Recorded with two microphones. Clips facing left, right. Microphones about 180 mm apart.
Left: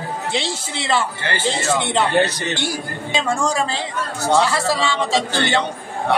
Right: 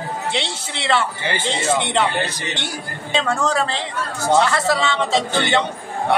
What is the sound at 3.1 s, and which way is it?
A man's voice, 10° left (ahead or behind).